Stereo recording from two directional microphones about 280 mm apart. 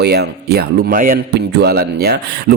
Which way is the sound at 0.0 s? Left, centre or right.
Right.